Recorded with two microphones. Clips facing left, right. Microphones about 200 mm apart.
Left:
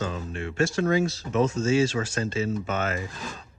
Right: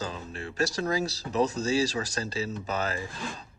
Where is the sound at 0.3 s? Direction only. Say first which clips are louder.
Left 3 dB; 35° right (ahead or behind).